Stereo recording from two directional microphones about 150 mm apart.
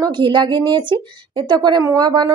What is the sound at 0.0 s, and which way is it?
A woman's voice, 30° right (ahead or behind).